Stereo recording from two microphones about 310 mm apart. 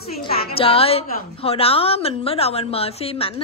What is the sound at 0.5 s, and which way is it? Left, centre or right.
A woman's voice, centre.